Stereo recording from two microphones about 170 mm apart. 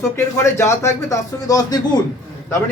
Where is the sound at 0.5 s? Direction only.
15° left (ahead or behind).